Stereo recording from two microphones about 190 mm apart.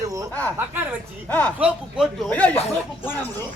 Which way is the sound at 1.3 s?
10° left (ahead or behind).